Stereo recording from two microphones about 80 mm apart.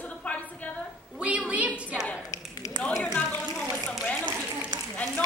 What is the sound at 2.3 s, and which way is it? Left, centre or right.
Tap, left.